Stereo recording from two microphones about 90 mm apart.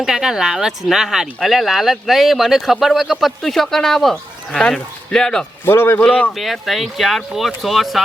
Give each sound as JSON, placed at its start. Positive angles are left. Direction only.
{"t": 0.0, "sound": "speech", "side_deg": -5}
{"t": 5.6, "sound": "a man's voice", "side_deg": 25}
{"t": 6.3, "sound": "speech", "side_deg": 0}